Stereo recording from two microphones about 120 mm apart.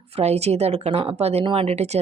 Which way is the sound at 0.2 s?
65° right (ahead or behind).